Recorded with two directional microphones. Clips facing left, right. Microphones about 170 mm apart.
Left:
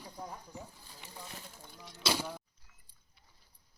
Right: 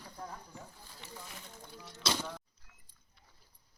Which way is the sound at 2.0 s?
10° left (ahead or behind).